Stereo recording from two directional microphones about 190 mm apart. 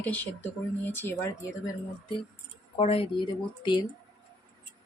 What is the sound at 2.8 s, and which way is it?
Speech, 30° left (ahead or behind).